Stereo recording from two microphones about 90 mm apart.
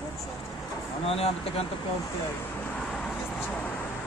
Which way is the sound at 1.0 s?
90° left.